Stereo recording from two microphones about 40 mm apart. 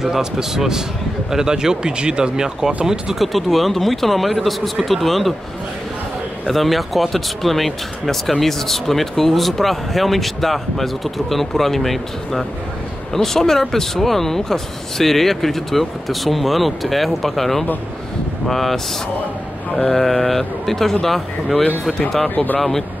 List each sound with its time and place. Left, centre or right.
0.0 s speech: centre
3.2 s speech: centre
6.4 s speech: centre
19.9 s speech: centre
22.3 s speech: left
22.6 s speech: centre